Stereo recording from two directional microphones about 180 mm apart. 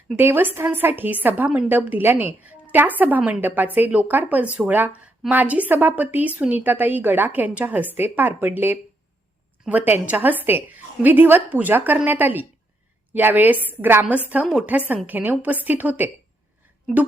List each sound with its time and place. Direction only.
0.2 s a woman's voice: 10° right (ahead or behind)